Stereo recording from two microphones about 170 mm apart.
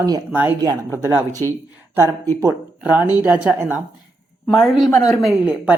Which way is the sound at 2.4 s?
10° right (ahead or behind).